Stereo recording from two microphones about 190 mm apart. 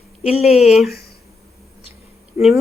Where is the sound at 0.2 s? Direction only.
35° left (ahead or behind).